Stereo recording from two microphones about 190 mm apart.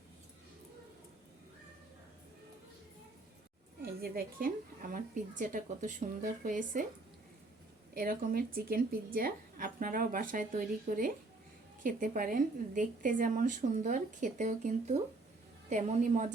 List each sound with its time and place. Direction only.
3.8 s speech: 50° right (ahead or behind)
7.9 s a woman's voice: 50° right (ahead or behind)